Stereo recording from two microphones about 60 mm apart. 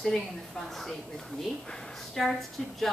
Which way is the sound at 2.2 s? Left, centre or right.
Centre.